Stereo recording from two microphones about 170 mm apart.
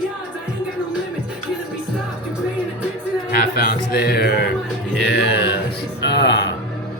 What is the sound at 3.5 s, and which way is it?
Speech, 65° left (ahead or behind).